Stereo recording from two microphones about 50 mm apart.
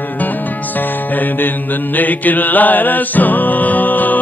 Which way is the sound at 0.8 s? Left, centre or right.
Left.